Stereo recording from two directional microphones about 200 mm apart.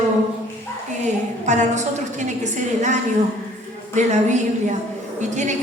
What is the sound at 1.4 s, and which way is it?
Speech, 35° right (ahead or behind).